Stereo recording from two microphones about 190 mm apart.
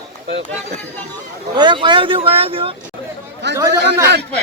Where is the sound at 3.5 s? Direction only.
15° right (ahead or behind).